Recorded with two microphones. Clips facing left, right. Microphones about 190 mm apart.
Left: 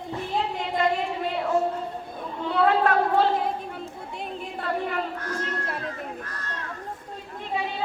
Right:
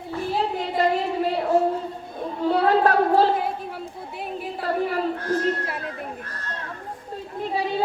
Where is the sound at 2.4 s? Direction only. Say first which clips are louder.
Right 3 dB; 35° right (ahead or behind).